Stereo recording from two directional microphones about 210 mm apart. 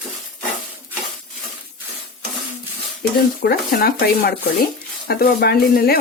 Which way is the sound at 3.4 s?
50° left (ahead or behind).